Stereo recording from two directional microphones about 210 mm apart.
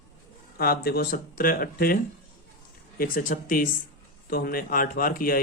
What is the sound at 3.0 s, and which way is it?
Speech, 40° left (ahead or behind).